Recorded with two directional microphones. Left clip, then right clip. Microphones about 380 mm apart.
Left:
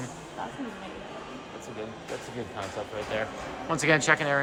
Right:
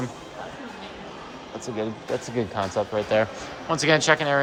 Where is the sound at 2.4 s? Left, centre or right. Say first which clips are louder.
Right 11 dB; centre.